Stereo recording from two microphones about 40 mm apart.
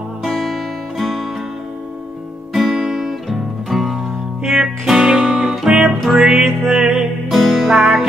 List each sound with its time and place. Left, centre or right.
0.2 s music: centre
2.5 s music: centre
6.4 s music: centre
6.8 s music: centre
7.2 s music: centre
7.6 s music: centre